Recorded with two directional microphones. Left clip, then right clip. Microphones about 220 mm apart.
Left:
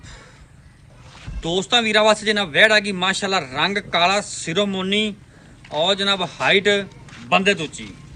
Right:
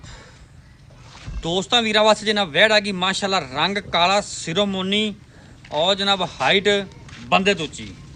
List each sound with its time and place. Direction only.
1.1 s a man's voice: 5° right (ahead or behind)